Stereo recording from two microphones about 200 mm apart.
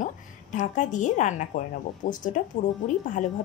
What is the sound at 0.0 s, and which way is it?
A woman's voice, 40° left (ahead or behind).